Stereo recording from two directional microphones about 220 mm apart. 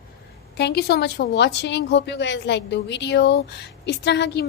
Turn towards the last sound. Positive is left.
turn(degrees=50)  # may be behind; listen again after turning